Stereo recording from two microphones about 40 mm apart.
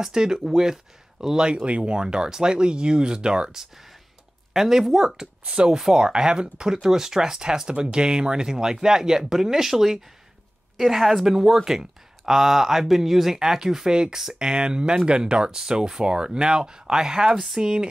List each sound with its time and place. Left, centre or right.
0.0 s speech: centre
4.6 s speech: centre
5.4 s speech: right
5.8 s speech: centre